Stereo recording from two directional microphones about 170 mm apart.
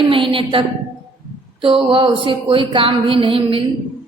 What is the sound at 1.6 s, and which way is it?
Speech, 30° right (ahead or behind).